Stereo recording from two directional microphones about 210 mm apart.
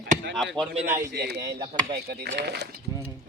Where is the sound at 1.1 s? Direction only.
50° right (ahead or behind).